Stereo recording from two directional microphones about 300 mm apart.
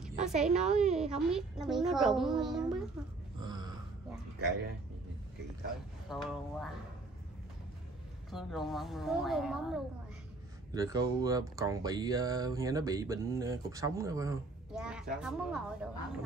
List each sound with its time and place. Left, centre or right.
0.1 s a sound: right
0.6 s a woman's voice: centre
3.3 s a sound: centre
6.0 s a woman's voice: centre
8.3 s a woman's voice: centre
10.7 s speech: centre